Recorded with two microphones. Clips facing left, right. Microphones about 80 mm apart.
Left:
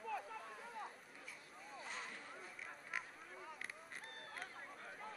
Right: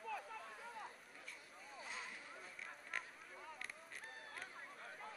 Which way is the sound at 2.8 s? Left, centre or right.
Centre.